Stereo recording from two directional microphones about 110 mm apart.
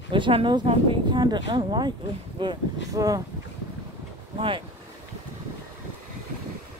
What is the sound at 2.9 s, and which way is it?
Speech, 30° right (ahead or behind).